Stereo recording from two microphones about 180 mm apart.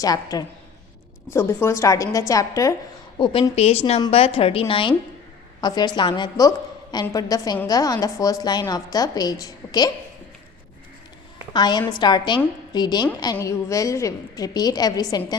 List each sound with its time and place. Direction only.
0.0 s a woman's voice: 20° left (ahead or behind)
3.2 s a woman's voice: 30° left (ahead or behind)
11.5 s a woman's voice: 25° left (ahead or behind)